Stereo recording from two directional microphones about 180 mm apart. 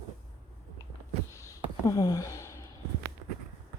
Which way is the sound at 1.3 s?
15° left (ahead or behind).